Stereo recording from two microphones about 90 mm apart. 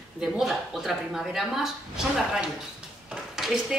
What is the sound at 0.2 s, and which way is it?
A woman's voice, 5° right (ahead or behind).